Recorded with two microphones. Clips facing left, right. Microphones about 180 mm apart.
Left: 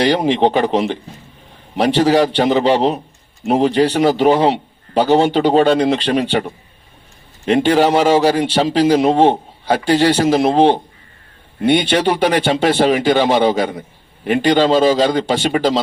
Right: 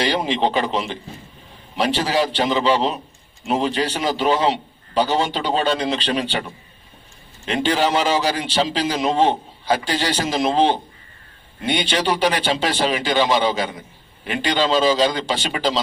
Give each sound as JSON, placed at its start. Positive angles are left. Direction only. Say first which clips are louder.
{"t": 0.0, "sound": "a man's voice", "louder": "left 6 dB", "side_deg": 55}
{"t": 7.4, "sound": "a man's voice", "louder": "left 7 dB", "side_deg": 55}